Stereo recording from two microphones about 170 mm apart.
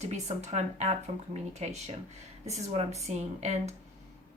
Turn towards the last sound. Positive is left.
turn(degrees=-40)  # may be behind; listen again after turning